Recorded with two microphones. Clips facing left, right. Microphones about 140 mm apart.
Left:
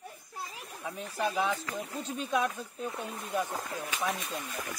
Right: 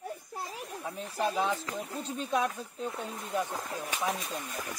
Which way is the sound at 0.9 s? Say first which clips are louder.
Right 1 dB; 35° right (ahead or behind).